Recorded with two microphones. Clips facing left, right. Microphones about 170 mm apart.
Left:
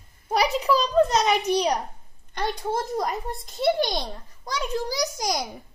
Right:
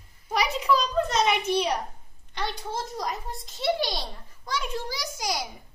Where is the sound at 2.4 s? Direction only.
50° left (ahead or behind).